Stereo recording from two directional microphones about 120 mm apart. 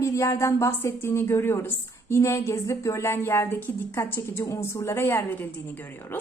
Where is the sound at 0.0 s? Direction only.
25° left (ahead or behind).